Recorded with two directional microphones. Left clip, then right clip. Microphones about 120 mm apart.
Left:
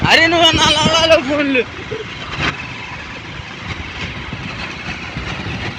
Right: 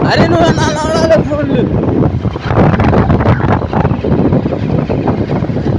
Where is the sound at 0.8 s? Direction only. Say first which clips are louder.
Right 4 dB; 65° right (ahead or behind).